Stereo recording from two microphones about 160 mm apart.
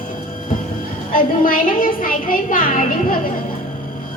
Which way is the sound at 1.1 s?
60° left (ahead or behind).